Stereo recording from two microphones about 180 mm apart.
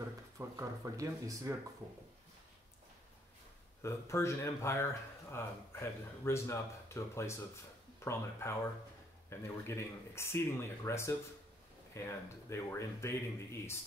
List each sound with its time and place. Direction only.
0.4 s speech: 15° right (ahead or behind)
3.8 s speech: 15° left (ahead or behind)